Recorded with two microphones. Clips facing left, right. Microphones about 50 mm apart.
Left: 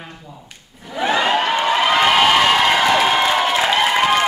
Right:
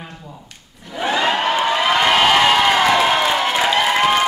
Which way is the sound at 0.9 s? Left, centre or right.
Centre.